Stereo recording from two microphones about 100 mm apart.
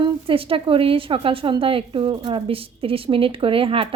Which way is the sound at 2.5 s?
70° right (ahead or behind).